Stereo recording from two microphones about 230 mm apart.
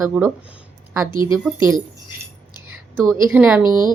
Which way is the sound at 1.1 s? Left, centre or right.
Centre.